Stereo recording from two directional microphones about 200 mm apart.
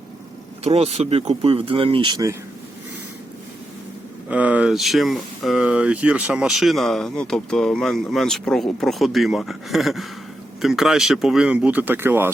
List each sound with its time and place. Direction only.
0.6 s speech: 30° right (ahead or behind)
4.3 s speech: 5° right (ahead or behind)